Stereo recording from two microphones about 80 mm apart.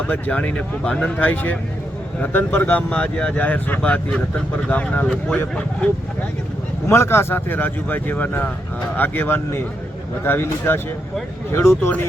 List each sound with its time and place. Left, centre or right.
0.0 s speech: centre
6.8 s speech: left